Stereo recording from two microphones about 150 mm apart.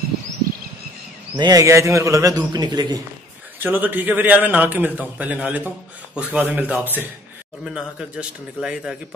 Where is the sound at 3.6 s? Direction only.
10° right (ahead or behind).